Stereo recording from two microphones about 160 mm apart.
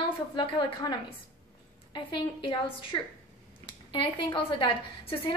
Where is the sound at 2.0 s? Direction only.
30° left (ahead or behind).